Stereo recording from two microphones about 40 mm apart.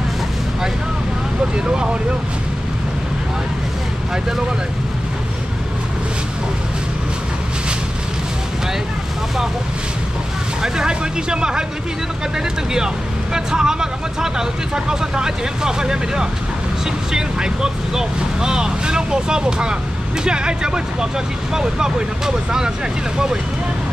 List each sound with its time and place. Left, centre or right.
10.6 s speech: centre
12.7 s speech: centre